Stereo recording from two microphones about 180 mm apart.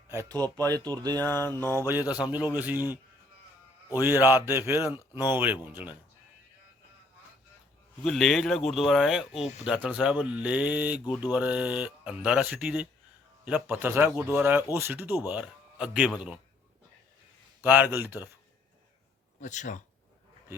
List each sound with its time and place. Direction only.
0.1 s speech: 15° right (ahead or behind)
1.2 s a sound: 10° left (ahead or behind)
2.0 s a man's voice: 20° left (ahead or behind)
2.3 s a man's voice: 10° right (ahead or behind)
4.0 s a man's voice: 10° right (ahead or behind)
8.0 s a man's voice: centre (ahead or behind)
17.6 s a man's voice: 10° right (ahead or behind)
19.4 s speech: 45° left (ahead or behind)